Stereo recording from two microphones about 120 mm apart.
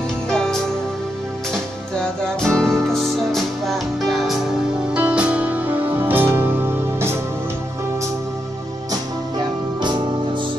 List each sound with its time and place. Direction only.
0.3 s music: 5° left (ahead or behind)
2.4 s music: 5° left (ahead or behind); by 7.2 s 20° right (ahead or behind)